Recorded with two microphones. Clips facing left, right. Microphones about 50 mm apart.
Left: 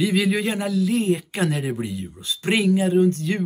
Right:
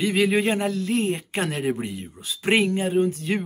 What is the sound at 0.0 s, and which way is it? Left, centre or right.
Speech, centre.